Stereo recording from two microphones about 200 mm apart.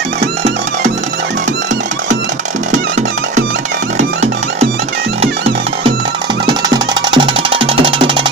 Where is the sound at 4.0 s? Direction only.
35° right (ahead or behind).